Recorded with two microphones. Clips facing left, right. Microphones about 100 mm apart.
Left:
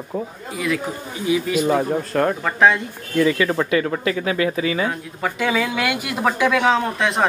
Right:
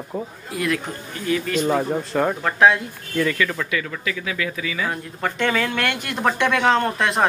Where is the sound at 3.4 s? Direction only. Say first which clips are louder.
Left 7 dB; 35° left (ahead or behind).